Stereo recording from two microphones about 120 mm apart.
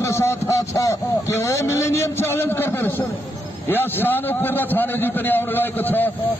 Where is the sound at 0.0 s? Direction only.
20° left (ahead or behind).